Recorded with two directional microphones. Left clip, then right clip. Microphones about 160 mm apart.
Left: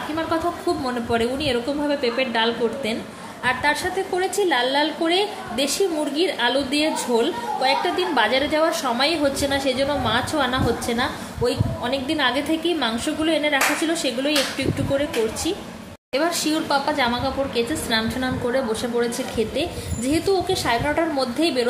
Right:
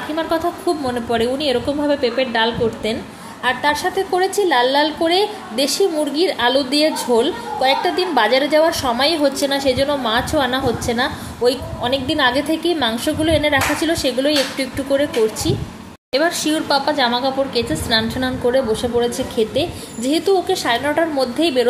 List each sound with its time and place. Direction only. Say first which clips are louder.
0.1 s a woman's voice: right 4 dB; 15° right (ahead or behind)